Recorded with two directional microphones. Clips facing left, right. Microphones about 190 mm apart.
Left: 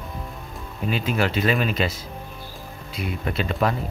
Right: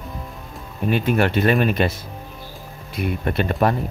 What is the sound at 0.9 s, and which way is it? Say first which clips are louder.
Speech: right 5 dB; 55° right (ahead or behind).